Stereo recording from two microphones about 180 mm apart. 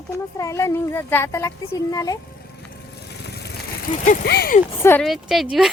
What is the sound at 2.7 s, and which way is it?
Lawn mower, 65° left (ahead or behind).